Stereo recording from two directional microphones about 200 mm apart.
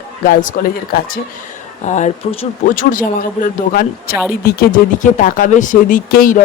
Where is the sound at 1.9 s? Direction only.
35° left (ahead or behind).